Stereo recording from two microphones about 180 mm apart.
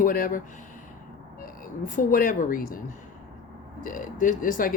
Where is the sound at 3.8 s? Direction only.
45° left (ahead or behind).